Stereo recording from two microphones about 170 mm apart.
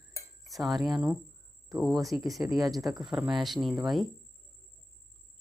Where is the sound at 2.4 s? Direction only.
10° right (ahead or behind).